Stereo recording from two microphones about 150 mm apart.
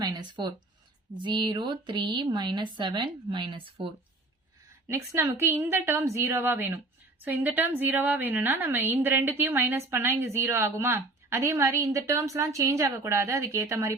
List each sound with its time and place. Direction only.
0.0 s a sound: 30° right (ahead or behind)
1.2 s speech: 30° right (ahead or behind)
4.9 s a woman's voice: 20° right (ahead or behind)